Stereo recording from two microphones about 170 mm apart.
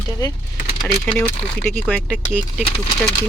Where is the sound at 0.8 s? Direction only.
10° left (ahead or behind).